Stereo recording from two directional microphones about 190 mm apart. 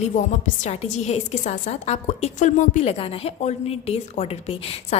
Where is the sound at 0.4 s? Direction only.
40° left (ahead or behind).